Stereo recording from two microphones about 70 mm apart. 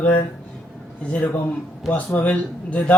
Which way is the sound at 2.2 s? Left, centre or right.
Left.